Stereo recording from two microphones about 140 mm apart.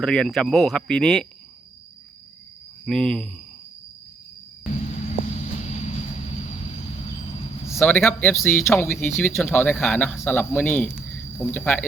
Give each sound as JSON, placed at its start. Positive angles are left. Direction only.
{"t": 0.0, "sound": "speech", "side_deg": 5}
{"t": 2.8, "sound": "speech", "side_deg": 5}
{"t": 5.2, "sound": "vehicle", "side_deg": 60}
{"t": 7.7, "sound": "a man's voice", "side_deg": 15}